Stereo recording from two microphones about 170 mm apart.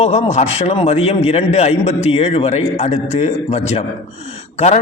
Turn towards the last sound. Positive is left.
turn(degrees=40)  # may be behind; listen again after turning